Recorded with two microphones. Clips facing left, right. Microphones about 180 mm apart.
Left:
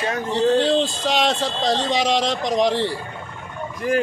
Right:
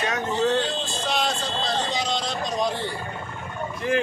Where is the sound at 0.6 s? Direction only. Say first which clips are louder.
Left 9 dB; 90° left.